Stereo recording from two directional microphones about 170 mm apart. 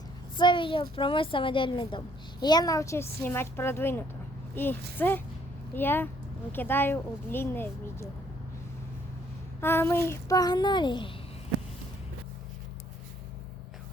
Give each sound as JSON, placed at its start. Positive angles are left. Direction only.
{"t": 0.3, "sound": "a woman's voice", "side_deg": 30}
{"t": 9.6, "sound": "a woman's voice", "side_deg": 15}